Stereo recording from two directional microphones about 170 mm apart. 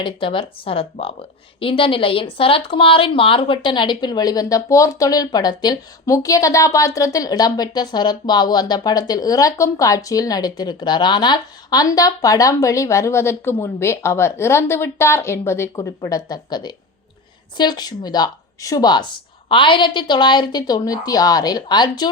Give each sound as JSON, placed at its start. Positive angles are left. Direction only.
{"t": 0.0, "sound": "speech", "side_deg": 30}